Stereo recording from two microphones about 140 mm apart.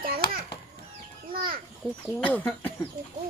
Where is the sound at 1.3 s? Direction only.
90° right.